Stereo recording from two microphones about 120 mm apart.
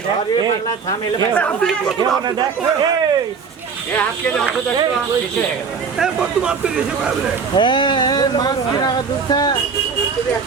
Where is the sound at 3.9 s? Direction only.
10° left (ahead or behind).